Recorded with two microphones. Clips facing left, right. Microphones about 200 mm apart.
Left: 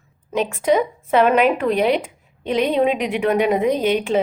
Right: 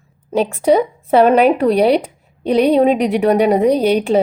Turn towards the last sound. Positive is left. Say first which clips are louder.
# right 5 dB
turn(degrees=-40)  # may be behind; listen again after turning